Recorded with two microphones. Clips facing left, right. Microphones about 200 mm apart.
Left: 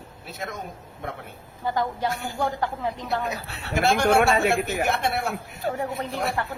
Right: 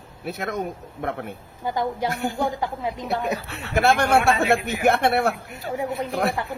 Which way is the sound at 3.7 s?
60° right (ahead or behind).